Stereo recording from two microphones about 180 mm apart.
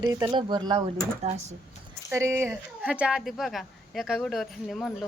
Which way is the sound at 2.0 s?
15° right (ahead or behind).